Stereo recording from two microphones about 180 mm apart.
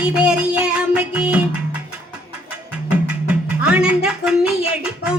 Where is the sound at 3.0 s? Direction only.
5° right (ahead or behind).